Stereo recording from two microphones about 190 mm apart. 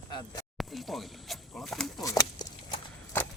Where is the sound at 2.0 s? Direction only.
20° left (ahead or behind).